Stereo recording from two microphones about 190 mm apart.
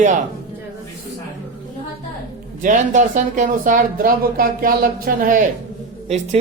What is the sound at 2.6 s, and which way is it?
Speech, 40° right (ahead or behind).